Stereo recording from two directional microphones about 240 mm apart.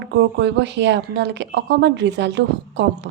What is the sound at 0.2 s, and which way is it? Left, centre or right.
A woman's voice, right.